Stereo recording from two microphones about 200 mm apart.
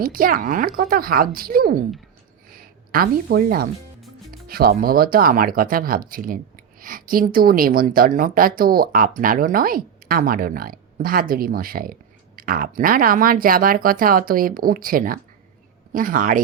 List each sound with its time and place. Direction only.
0.0 s speech: 45° right (ahead or behind)